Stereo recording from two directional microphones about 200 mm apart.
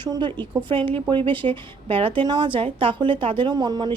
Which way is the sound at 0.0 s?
20° right (ahead or behind).